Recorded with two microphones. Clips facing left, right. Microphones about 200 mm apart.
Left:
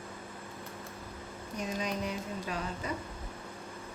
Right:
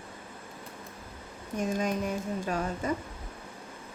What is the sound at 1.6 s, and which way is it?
Speech, 50° right (ahead or behind).